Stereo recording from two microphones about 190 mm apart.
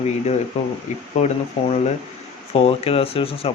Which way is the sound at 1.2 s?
35° left (ahead or behind).